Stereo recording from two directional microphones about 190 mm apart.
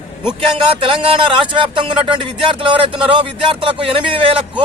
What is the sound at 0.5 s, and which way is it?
Speech, 30° right (ahead or behind).